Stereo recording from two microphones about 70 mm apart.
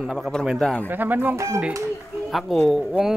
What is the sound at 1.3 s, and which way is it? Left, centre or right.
Speech, right.